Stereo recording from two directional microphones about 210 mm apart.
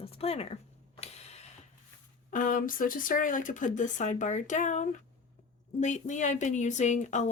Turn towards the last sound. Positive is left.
turn(degrees=35)  # may be behind; listen again after turning